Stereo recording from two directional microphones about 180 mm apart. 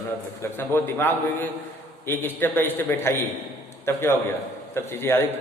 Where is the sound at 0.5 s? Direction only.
10° left (ahead or behind).